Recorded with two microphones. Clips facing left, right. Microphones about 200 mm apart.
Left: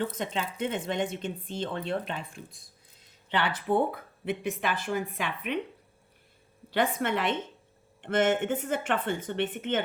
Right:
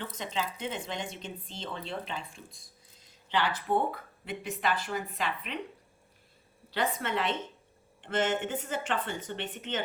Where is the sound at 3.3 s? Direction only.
60° left (ahead or behind).